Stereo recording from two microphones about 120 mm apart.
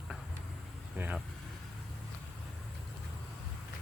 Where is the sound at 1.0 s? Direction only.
20° right (ahead or behind).